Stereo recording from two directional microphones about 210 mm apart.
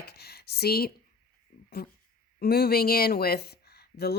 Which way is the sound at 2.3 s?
45° left (ahead or behind).